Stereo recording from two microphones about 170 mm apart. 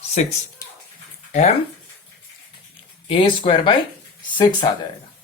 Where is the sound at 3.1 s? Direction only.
30° left (ahead or behind).